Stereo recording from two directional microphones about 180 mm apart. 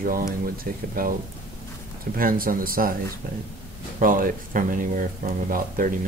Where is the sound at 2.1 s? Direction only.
50° right (ahead or behind).